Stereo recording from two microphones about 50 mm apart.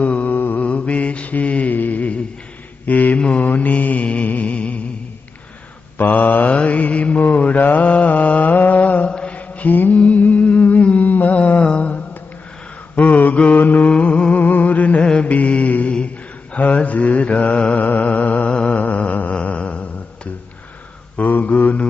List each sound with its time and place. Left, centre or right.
0.0 s mantra: left
0.6 s mantra: left
5.9 s mantra: left
9.9 s a sound: left
12.9 s mantra: left
13.8 s music: left
14.4 s a sound: left
15.0 s mantra: left
21.2 s mantra: left